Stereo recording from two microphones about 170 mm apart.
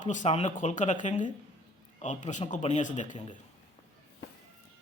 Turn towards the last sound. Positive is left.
turn(degrees=45)  # may be behind; listen again after turning